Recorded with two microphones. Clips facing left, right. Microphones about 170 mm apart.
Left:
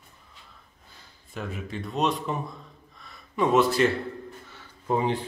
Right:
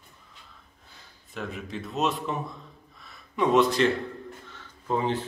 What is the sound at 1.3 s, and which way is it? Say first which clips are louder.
Speech: left 1 dB; centre (ahead or behind).